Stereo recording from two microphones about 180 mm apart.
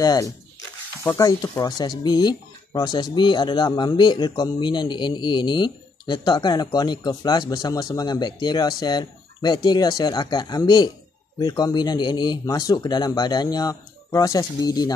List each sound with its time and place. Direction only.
0.0 s speech: 20° left (ahead or behind)